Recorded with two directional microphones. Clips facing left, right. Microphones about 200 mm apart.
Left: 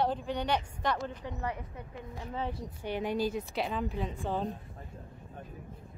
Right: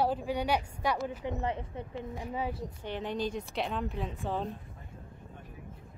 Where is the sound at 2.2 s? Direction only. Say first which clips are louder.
Even; 10° right (ahead or behind).